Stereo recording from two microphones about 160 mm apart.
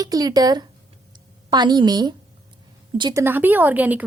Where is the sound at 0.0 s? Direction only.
25° right (ahead or behind).